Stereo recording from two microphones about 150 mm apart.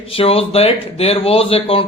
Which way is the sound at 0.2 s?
40° left (ahead or behind).